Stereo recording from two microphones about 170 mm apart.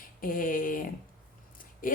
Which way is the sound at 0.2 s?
55° left (ahead or behind).